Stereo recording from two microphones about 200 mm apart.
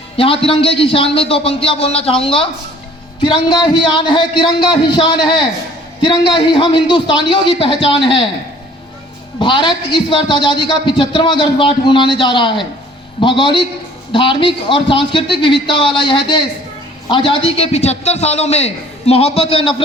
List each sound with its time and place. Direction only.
0.2 s a man's voice: 25° left (ahead or behind)
9.4 s a man's voice: 25° left (ahead or behind)